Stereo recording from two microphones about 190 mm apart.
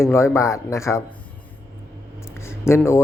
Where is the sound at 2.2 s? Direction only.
15° left (ahead or behind).